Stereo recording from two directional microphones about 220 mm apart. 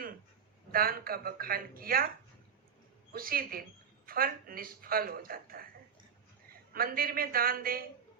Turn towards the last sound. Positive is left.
turn(degrees=-40)  # may be behind; listen again after turning